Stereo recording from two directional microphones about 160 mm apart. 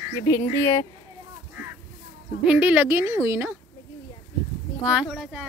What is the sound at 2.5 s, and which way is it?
A woman's voice, 10° right (ahead or behind).